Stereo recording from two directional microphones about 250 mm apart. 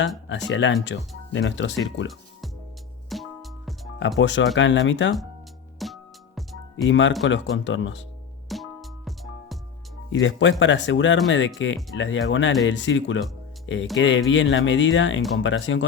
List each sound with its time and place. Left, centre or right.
0.3 s speech: left
3.1 s music: centre
4.2 s speech: left
5.8 s music: centre
6.8 s speech: left
8.4 s music: centre
10.1 s speech: left